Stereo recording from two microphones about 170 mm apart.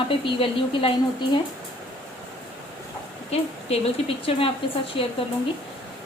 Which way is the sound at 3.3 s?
35° left (ahead or behind).